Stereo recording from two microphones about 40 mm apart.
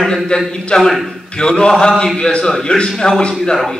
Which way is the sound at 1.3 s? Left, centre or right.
Left.